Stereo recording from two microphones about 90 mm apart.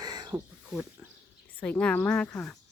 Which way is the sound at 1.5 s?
15° left (ahead or behind).